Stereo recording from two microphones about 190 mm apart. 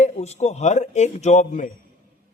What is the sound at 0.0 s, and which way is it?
Speech, 35° left (ahead or behind).